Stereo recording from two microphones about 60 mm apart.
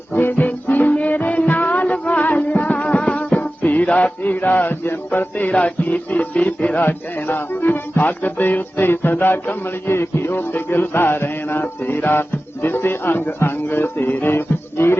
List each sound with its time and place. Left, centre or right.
0.1 s music: left
6.8 s music: left